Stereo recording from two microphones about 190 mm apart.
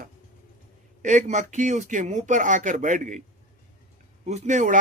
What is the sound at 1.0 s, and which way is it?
Speech, 40° right (ahead or behind).